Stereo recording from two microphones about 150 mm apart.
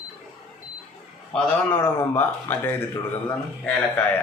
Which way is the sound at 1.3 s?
15° left (ahead or behind).